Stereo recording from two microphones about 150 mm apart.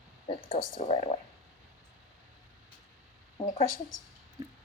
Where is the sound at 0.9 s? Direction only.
45° left (ahead or behind).